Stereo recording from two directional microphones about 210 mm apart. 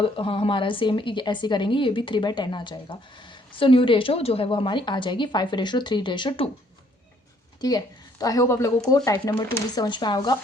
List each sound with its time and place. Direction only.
0.0 s a woman's voice: 25° left (ahead or behind)
7.6 s a woman's voice: 20° left (ahead or behind)